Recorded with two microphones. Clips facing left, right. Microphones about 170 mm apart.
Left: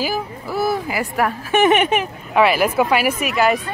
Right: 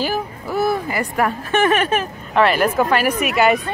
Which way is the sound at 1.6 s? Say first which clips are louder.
Left 2 dB; 15° left (ahead or behind).